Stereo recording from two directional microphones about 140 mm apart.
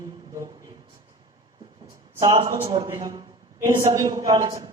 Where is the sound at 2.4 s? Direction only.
35° right (ahead or behind).